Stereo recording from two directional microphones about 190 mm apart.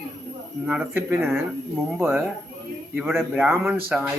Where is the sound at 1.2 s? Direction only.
Centre (ahead or behind).